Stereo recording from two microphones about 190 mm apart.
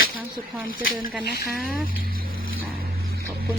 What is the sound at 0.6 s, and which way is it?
Speech, 50° left (ahead or behind).